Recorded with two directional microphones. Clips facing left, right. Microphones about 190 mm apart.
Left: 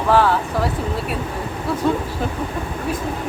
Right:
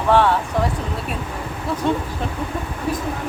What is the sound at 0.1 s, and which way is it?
Speech, centre (ahead or behind).